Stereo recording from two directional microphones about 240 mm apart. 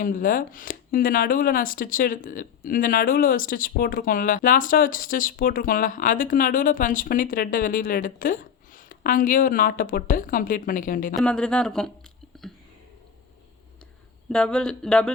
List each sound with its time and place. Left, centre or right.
0.0 s speech: left
11.2 s speech: centre
12.3 s a sound: centre
14.3 s speech: centre